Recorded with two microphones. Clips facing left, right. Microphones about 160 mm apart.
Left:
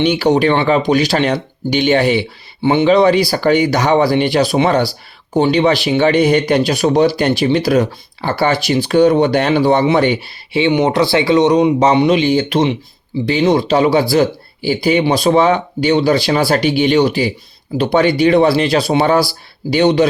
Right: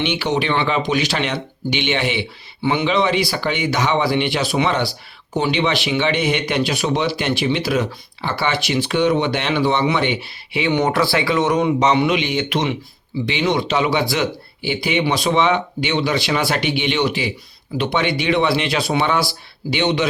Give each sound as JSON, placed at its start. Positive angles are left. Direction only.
{"t": 0.0, "sound": "speech", "side_deg": 40}
{"t": 10.8, "sound": "speech", "side_deg": 25}
{"t": 12.0, "sound": "speech", "side_deg": 35}